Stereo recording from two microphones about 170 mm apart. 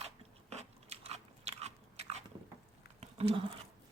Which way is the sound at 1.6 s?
40° right (ahead or behind).